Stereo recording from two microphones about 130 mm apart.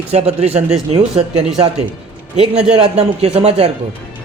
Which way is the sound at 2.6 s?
55° right (ahead or behind).